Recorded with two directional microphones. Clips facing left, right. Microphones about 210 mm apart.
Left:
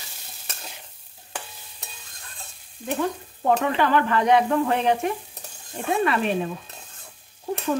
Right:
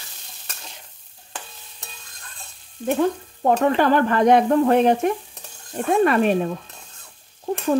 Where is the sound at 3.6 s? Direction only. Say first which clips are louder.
Right 4 dB; 40° right (ahead or behind).